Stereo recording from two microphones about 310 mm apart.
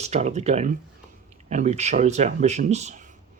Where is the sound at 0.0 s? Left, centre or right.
Right.